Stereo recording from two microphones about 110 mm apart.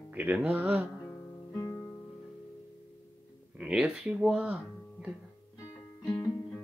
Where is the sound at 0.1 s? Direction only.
15° right (ahead or behind).